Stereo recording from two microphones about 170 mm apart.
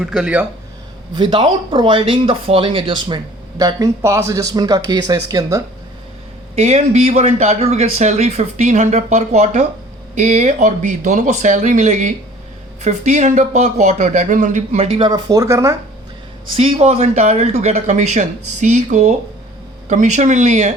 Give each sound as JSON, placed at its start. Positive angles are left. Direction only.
{"t": 0.0, "sound": "speech", "side_deg": -5}
{"t": 1.1, "sound": "speech", "side_deg": -25}
{"t": 6.6, "sound": "speech", "side_deg": -40}
{"t": 16.6, "sound": "speech", "side_deg": -35}